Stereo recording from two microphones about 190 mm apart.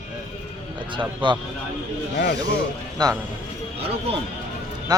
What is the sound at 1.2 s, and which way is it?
Speech, 25° right (ahead or behind).